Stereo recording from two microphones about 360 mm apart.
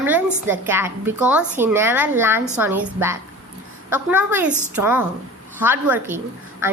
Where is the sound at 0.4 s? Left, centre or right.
Centre.